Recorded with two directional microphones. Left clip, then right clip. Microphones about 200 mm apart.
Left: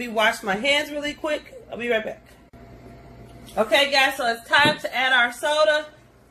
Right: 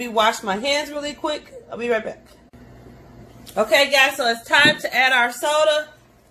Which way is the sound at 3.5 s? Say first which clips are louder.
Right 3 dB; 35° right (ahead or behind).